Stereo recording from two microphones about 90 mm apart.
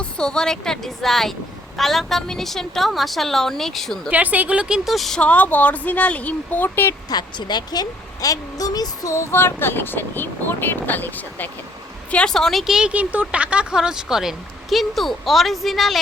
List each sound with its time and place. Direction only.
0.0 s speech: 10° left (ahead or behind)
4.1 s speech: 15° right (ahead or behind)
4.9 s speech: centre (ahead or behind)
5.2 s speech: 15° left (ahead or behind)
7.1 s a woman's voice: 55° left (ahead or behind)
9.3 s speech: 25° left (ahead or behind)
12.1 s speech: 5° left (ahead or behind)